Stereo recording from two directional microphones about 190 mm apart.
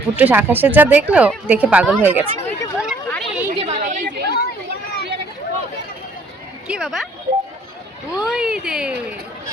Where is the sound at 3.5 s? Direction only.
35° right (ahead or behind).